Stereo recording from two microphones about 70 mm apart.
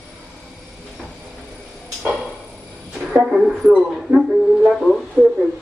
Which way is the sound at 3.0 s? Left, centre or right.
Centre.